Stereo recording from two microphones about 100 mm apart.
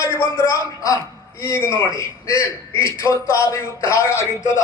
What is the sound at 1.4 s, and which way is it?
Speech, 25° left (ahead or behind).